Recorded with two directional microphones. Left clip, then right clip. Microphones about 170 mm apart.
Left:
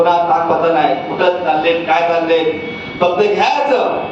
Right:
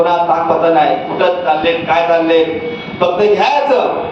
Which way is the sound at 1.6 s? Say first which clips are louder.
Even; 20° right (ahead or behind).